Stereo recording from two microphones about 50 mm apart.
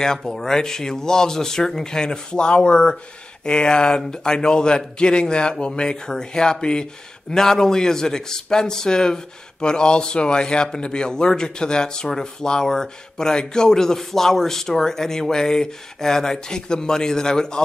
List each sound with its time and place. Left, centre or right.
0.0 s a man's voice: centre